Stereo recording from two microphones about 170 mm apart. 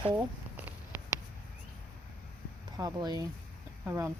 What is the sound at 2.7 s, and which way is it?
Speech, 25° right (ahead or behind).